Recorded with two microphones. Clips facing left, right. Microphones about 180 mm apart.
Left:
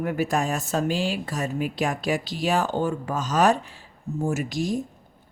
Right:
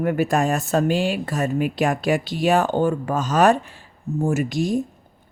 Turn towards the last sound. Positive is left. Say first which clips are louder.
# right 4 dB
turn(degrees=-60)  # may be behind; listen again after turning